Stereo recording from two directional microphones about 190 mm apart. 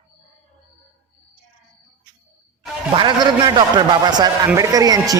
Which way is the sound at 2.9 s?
25° right (ahead or behind).